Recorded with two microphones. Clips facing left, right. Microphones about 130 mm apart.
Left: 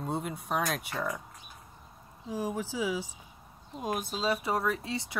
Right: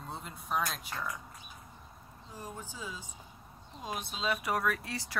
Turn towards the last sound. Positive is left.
turn(degrees=25)  # may be behind; listen again after turning